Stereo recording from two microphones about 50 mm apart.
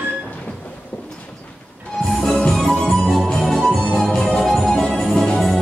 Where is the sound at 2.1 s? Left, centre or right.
Centre.